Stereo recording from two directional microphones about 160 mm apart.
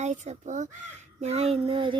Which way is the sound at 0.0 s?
45° right (ahead or behind).